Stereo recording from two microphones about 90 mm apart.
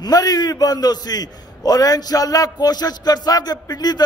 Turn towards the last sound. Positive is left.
turn(degrees=50)  # may be behind; listen again after turning